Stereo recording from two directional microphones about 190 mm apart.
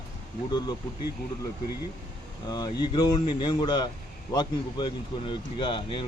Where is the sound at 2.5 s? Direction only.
20° left (ahead or behind).